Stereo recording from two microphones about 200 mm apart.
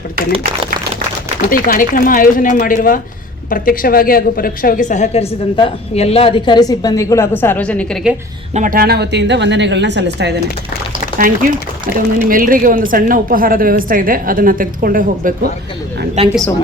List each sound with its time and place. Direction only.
0.2 s a woman's voice: 45° right (ahead or behind)
1.5 s a woman's voice: 45° left (ahead or behind); by 7.9 s 5° left (ahead or behind)
8.5 s a woman's voice: 45° right (ahead or behind)
11.9 s a woman's voice: 45° right (ahead or behind)
16.2 s speech: 30° right (ahead or behind)